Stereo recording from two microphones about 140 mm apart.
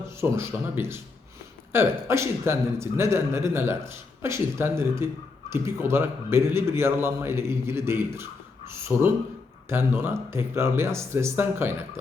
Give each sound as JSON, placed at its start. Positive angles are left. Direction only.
{"t": 0.0, "sound": "a man's voice", "side_deg": -15}